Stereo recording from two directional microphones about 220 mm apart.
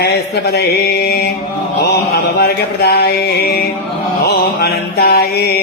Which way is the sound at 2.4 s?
45° left (ahead or behind).